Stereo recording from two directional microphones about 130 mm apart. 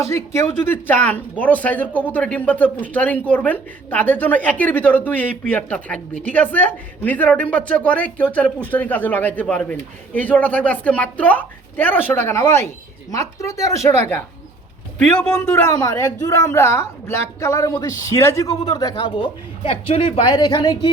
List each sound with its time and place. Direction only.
0.9 s a woman's voice: 15° left (ahead or behind); by 20.9 s 35° left (ahead or behind)